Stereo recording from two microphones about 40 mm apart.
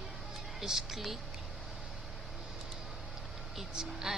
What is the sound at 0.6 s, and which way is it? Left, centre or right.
Speech, centre.